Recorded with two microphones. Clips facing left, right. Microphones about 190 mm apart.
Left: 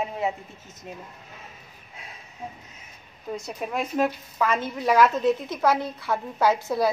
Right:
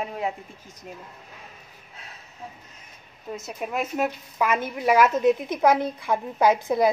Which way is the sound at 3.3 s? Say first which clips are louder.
Even; 5° right (ahead or behind).